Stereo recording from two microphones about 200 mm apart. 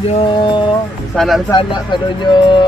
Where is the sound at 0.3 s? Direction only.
25° left (ahead or behind).